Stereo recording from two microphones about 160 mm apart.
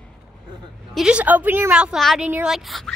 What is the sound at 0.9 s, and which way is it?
A woman's voice, 5° right (ahead or behind).